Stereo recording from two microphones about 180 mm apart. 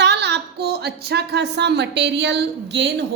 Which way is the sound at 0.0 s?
70° right (ahead or behind).